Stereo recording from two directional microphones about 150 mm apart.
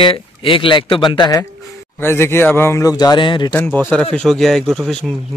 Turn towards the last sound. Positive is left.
turn(degrees=5)  # may be behind; listen again after turning